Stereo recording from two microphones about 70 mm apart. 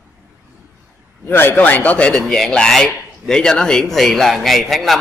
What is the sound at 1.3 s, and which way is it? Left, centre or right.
A man's voice, left.